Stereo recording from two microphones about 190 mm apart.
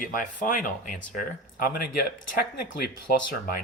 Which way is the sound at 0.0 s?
45° left (ahead or behind).